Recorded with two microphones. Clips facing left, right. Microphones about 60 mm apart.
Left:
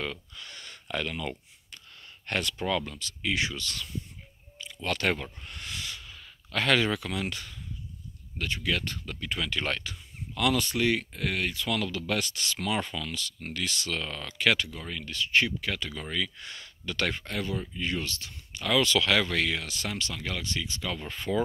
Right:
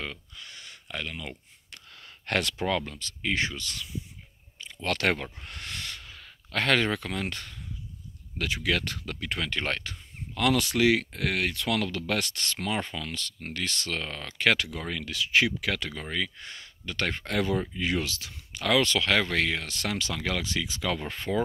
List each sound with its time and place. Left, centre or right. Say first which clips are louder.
0.0 s speech: left 2 dB; centre
1.7 s a sound: right 1 dB; right
2.8 s speech: even; right
3.5 s speech: left 1 dB; right
4.8 s speech: right 2 dB; right
8.4 s speech: right 2 dB; right
10.6 s speech: right 4 dB; right
13.2 s speech: even; right
14.6 s speech: right 2 dB; right
15.9 s speech: right 1 dB; right
17.3 s speech: right 5 dB; right
18.8 s speech: left 2 dB; right
21.0 s speech: right 1 dB; right